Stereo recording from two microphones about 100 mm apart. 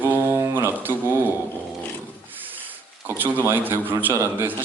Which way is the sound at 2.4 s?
20° right (ahead or behind).